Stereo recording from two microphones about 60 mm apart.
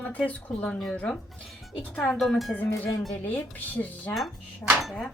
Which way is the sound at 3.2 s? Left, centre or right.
Left.